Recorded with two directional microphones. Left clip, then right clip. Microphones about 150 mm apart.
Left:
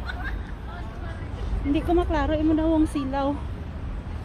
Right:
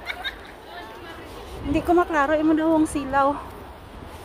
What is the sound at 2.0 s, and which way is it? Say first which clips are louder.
A woman's voice: right 4 dB; 35° right (ahead or behind).